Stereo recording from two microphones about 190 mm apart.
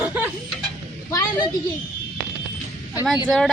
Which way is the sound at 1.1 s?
20° left (ahead or behind).